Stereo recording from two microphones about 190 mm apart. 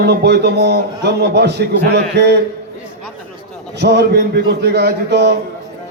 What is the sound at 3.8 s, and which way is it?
A man's voice, 65° right (ahead or behind).